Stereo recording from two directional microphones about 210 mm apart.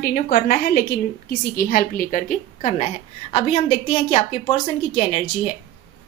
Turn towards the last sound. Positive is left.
turn(degrees=30)  # may be behind; listen again after turning